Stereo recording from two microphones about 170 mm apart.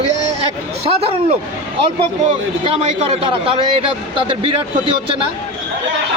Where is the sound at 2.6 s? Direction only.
35° right (ahead or behind).